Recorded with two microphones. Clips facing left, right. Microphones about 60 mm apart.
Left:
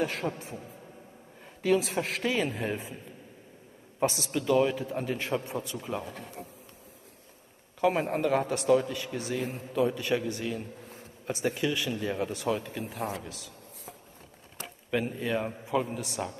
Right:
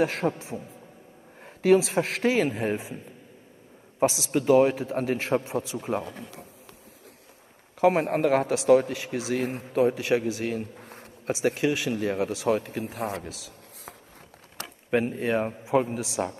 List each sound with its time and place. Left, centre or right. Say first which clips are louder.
0.0 s a man's voice: right 6 dB; right
1.4 s a sound: right 6 dB; right
1.8 s a man's voice: right 5 dB; right
4.3 s a man's voice: right 6 dB; right
5.8 s a man's voice: right 5 dB; right
7.8 s a man's voice: right 5 dB; right
8.6 s a man's voice: right 5 dB; right
8.9 s a man's voice: right 4 dB; right
10.4 s speech: right 4 dB; right
11.9 s a man's voice: right 4 dB; right
13.3 s a sound: right 2 dB; right
14.9 s a man's voice: right 5 dB; right
16.2 s speech: right 6 dB; right